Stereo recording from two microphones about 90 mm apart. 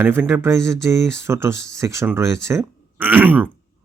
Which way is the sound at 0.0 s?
25° right (ahead or behind).